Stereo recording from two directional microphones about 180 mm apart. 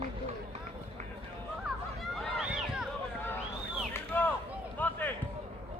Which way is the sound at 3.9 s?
10° left (ahead or behind).